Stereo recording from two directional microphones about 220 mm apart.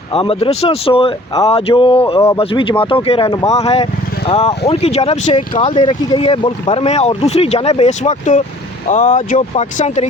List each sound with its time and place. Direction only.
0.1 s speech: 25° left (ahead or behind)